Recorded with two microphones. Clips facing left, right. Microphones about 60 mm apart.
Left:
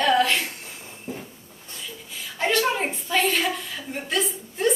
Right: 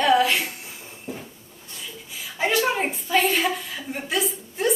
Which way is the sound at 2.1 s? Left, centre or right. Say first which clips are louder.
Even; centre.